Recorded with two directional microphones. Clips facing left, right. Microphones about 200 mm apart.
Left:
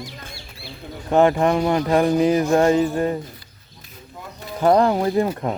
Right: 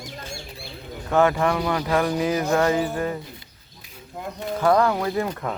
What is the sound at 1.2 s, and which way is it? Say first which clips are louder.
Speech: left 4 dB; 30° left (ahead or behind).